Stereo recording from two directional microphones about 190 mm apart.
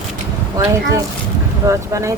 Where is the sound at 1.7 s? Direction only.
15° right (ahead or behind).